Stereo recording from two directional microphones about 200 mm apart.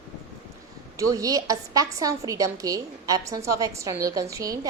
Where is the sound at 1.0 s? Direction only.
15° right (ahead or behind).